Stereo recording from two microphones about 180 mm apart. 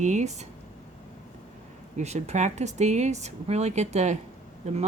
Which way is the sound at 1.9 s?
35° right (ahead or behind).